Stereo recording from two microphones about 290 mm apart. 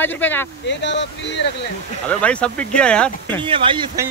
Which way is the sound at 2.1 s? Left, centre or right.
Centre.